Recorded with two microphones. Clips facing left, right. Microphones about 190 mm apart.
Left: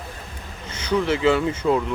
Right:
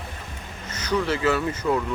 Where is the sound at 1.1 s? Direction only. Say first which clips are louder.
Left 4 dB; 20° left (ahead or behind).